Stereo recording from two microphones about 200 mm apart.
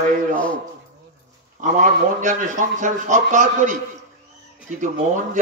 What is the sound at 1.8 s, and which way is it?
A man's voice, 40° right (ahead or behind).